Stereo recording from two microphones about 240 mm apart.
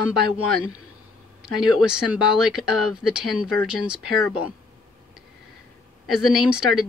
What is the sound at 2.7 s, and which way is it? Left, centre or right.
Speech, left.